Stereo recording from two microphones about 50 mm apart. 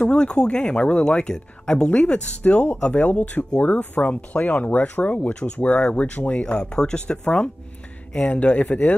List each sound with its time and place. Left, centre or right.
0.0 s speech: centre
6.4 s speech: centre